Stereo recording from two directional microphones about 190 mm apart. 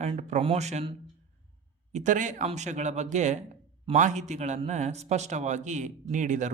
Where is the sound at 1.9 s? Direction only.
40° right (ahead or behind).